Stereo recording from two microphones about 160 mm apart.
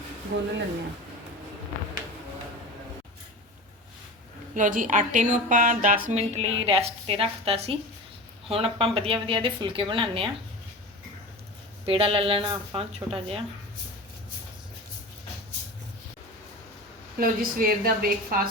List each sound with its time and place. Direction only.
0.3 s speech: 90° right
4.5 s speech: 55° right (ahead or behind)
6.1 s a woman's voice: 40° right (ahead or behind)
11.9 s a woman's voice: 35° right (ahead or behind)
17.2 s a woman's voice: 65° right (ahead or behind)